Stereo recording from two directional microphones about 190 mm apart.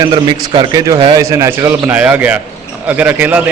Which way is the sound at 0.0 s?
25° right (ahead or behind).